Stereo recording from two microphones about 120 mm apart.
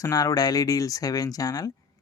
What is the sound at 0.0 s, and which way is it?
Speech, 30° left (ahead or behind).